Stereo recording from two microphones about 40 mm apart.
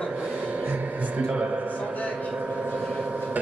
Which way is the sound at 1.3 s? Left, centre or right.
Right.